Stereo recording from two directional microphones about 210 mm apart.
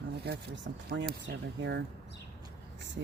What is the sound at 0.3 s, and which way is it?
Speech, 55° right (ahead or behind).